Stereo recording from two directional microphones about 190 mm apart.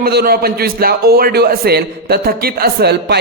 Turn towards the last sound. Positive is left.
turn(degrees=-55)  # may be behind; listen again after turning